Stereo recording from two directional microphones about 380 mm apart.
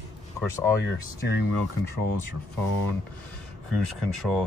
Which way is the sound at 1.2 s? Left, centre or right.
Left.